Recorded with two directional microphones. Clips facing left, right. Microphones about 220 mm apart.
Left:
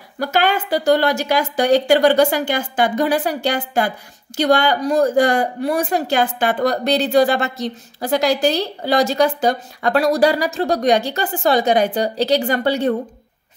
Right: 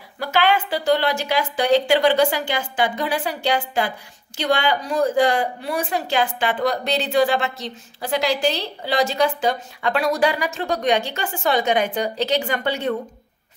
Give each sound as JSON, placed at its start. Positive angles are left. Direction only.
{"t": 0.2, "sound": "speech", "side_deg": 45}